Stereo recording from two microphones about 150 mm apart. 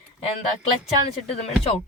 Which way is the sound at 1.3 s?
40° left (ahead or behind).